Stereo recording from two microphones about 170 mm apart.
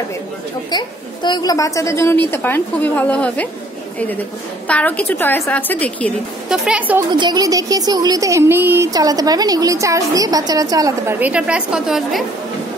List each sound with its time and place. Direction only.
0.7 s a woman's voice: 25° left (ahead or behind); by 3.4 s 10° left (ahead or behind)
4.6 s a woman's voice: 10° left (ahead or behind)
6.5 s a woman's voice: 5° right (ahead or behind)
7.1 s speech: 25° right (ahead or behind)
11.1 s a woman's voice: 10° right (ahead or behind)